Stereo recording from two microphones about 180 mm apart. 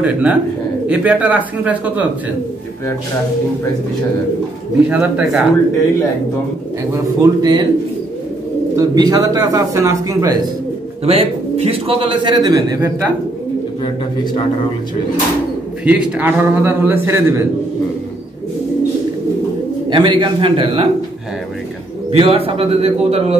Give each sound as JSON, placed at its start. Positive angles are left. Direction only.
{"t": 0.0, "sound": "a man's voice", "side_deg": -5}
{"t": 4.8, "sound": "a man's voice", "side_deg": -5}
{"t": 6.9, "sound": "a man's voice", "side_deg": -20}
{"t": 8.7, "sound": "a man's voice", "side_deg": -20}
{"t": 11.1, "sound": "a man's voice", "side_deg": -35}
{"t": 15.8, "sound": "a man's voice", "side_deg": -10}
{"t": 19.9, "sound": "a man's voice", "side_deg": -25}
{"t": 22.1, "sound": "a man's voice", "side_deg": -30}